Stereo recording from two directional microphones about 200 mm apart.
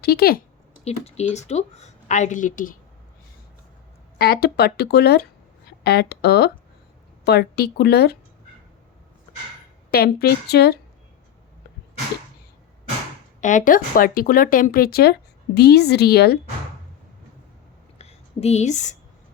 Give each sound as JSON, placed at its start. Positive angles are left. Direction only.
{"t": 0.0, "sound": "speech", "side_deg": 50}
{"t": 0.9, "sound": "speech", "side_deg": 35}
{"t": 4.2, "sound": "speech", "side_deg": 50}
{"t": 9.9, "sound": "speech", "side_deg": 50}
{"t": 13.4, "sound": "speech", "side_deg": 40}
{"t": 17.9, "sound": "a sound", "side_deg": 30}